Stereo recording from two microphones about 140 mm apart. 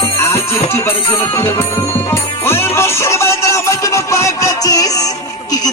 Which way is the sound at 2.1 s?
15° left (ahead or behind).